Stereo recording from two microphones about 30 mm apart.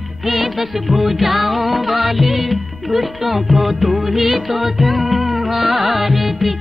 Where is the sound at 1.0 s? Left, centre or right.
Centre.